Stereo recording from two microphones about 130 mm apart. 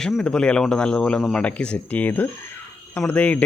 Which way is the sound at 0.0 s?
5° left (ahead or behind).